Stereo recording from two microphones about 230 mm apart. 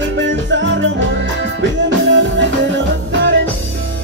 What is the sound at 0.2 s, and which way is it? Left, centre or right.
Music, right.